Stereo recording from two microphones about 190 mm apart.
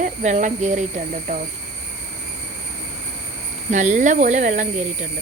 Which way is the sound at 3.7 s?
40° right (ahead or behind).